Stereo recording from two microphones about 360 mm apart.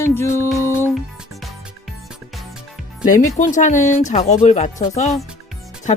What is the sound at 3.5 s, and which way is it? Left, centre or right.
Speech, centre.